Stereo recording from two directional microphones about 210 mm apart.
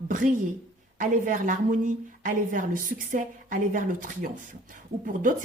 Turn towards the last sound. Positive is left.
turn(degrees=-40)  # may be behind; listen again after turning